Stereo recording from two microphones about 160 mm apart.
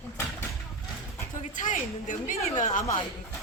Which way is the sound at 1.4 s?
55° left (ahead or behind).